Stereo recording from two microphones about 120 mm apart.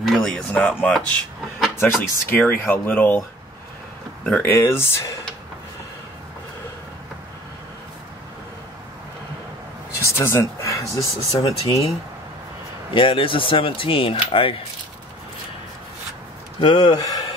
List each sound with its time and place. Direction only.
0.0 s speech: 5° left (ahead or behind)
4.3 s speech: 15° left (ahead or behind)
10.0 s speech: 20° left (ahead or behind)
12.9 s speech: 45° left (ahead or behind)
16.6 s speech: 35° left (ahead or behind)